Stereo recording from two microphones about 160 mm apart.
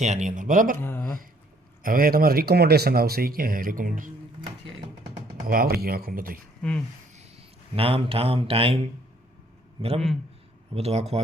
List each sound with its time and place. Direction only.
0.0 s speech: 45° right (ahead or behind)
0.8 s speech: 15° left (ahead or behind)
1.8 s speech: 60° right (ahead or behind)
5.5 s speech: 70° right (ahead or behind)
6.6 s speech: 5° left (ahead or behind)
7.1 s speech: 35° right (ahead or behind)
9.8 s speech: 35° right (ahead or behind)